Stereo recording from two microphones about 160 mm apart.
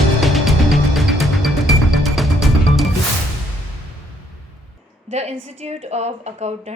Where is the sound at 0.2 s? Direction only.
Centre (ahead or behind).